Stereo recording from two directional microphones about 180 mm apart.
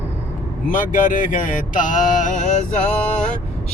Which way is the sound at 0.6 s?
45° left (ahead or behind).